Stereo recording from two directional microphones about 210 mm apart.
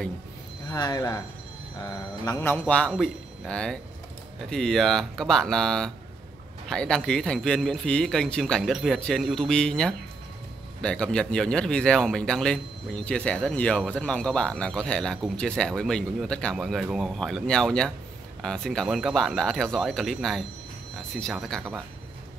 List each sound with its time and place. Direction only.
0.7 s speech: 20° left (ahead or behind); by 21.6 s centre (ahead or behind)